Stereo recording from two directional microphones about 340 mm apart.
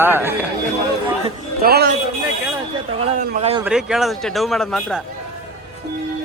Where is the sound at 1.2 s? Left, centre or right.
Right.